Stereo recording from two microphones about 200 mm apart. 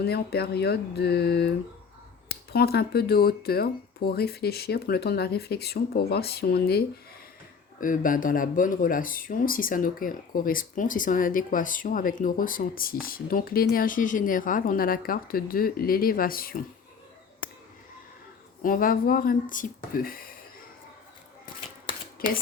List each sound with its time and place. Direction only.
0.0 s speech: 55° left (ahead or behind)
18.6 s speech: 45° left (ahead or behind)